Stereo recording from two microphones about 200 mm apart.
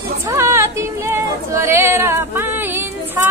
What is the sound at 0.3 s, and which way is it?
Female singing, 15° right (ahead or behind).